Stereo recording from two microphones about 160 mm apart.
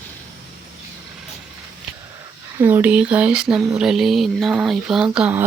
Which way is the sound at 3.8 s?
5° right (ahead or behind).